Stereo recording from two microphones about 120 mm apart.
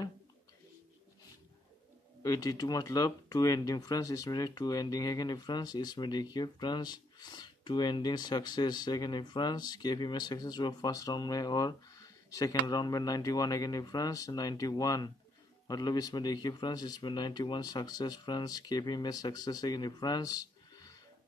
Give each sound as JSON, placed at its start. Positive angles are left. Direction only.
{"t": 2.2, "sound": "speech", "side_deg": 30}